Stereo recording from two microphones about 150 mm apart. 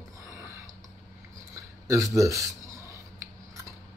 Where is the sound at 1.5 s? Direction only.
20° right (ahead or behind).